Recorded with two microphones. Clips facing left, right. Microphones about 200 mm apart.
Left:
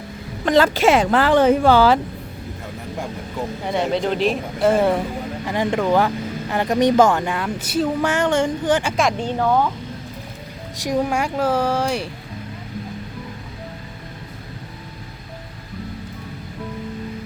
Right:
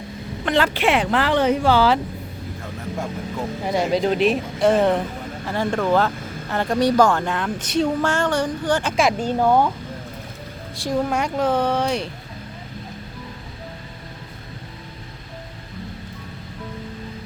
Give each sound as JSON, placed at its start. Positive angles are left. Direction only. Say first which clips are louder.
{"t": 0.4, "sound": "speech", "louder": "left 4 dB", "side_deg": 40}
{"t": 3.7, "sound": "a woman's voice", "louder": "right 1 dB", "side_deg": 0}
{"t": 9.0, "sound": "speech", "louder": "right 1 dB", "side_deg": -5}
{"t": 10.8, "sound": "a woman's voice", "louder": "left 1 dB", "side_deg": 10}